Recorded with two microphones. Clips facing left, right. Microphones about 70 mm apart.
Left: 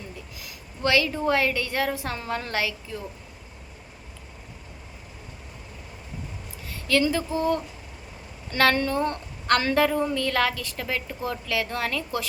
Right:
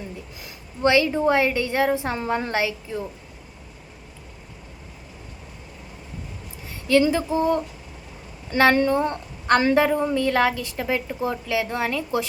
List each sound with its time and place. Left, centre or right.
0.4 s a woman's voice: right
6.7 s a woman's voice: right